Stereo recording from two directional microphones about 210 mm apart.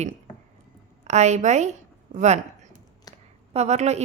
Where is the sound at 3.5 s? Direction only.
30° right (ahead or behind).